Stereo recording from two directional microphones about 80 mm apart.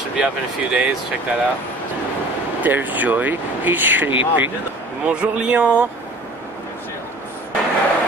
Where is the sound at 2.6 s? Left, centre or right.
Right.